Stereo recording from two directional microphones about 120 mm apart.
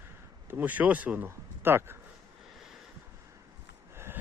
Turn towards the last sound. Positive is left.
turn(degrees=-20)  # may be behind; listen again after turning